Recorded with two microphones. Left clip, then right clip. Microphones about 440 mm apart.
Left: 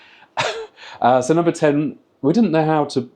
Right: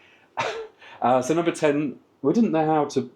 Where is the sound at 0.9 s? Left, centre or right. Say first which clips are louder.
Left 6 dB; left.